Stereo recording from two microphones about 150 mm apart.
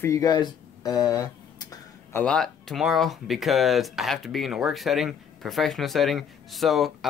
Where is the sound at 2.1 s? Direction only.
5° left (ahead or behind).